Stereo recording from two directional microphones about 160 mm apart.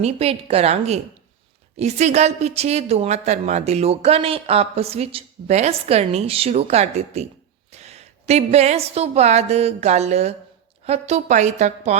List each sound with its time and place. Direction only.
0.0 s a woman's voice: 40° right (ahead or behind)